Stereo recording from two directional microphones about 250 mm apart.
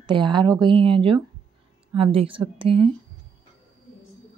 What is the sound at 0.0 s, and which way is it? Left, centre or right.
A woman's voice, centre.